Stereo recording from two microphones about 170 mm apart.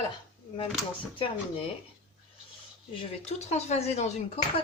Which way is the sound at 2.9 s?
35° left (ahead or behind).